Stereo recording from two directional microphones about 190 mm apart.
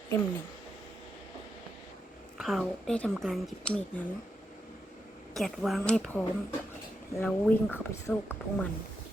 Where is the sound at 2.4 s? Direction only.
Centre (ahead or behind).